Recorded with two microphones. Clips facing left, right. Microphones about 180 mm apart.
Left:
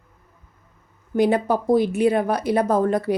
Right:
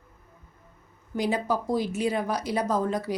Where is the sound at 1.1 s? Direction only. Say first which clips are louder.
Left 7 dB; 55° left (ahead or behind).